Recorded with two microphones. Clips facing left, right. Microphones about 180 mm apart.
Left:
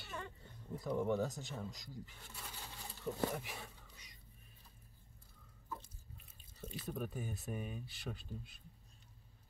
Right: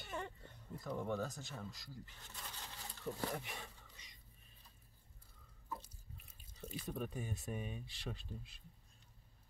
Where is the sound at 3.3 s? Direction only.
5° left (ahead or behind).